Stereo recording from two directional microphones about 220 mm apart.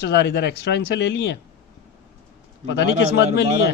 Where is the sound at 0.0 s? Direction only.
50° left (ahead or behind).